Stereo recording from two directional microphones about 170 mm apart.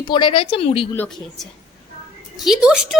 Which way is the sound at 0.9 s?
5° left (ahead or behind).